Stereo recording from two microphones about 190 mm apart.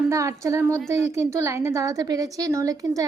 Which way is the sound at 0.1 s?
15° right (ahead or behind).